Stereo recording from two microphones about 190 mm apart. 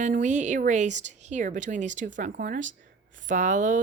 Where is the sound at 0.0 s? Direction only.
40° right (ahead or behind).